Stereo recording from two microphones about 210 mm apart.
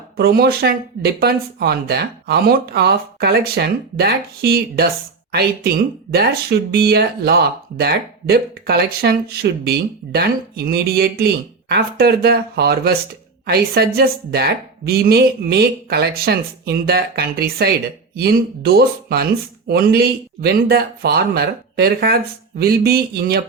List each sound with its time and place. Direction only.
0.2 s speech: 50° right (ahead or behind)